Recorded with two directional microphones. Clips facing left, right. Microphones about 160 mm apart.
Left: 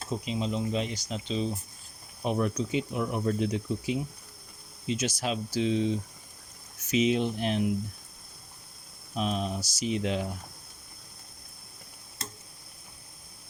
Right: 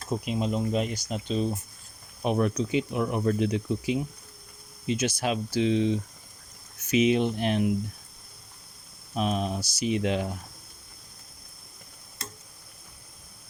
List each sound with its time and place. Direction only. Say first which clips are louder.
0.3 s speech: right 3 dB; 50° right (ahead or behind)
2.2 s speech: right 3 dB; 65° right (ahead or behind)
4.9 s speech: right 3 dB; 60° right (ahead or behind)
6.9 s speech: right 3 dB; 65° right (ahead or behind)
9.1 s speech: right 3 dB; 60° right (ahead or behind)